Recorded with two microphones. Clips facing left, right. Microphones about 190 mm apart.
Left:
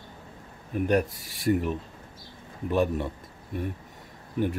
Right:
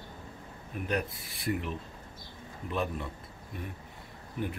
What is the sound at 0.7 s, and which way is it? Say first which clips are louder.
Speech: left 9 dB; 45° left (ahead or behind).